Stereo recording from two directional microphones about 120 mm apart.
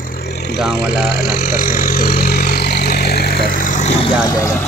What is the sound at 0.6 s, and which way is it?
Speech, centre (ahead or behind).